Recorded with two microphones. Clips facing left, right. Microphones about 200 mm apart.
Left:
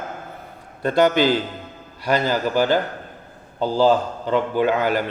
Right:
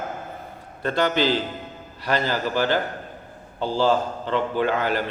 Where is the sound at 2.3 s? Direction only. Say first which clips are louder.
Left 5 dB; 45° left (ahead or behind).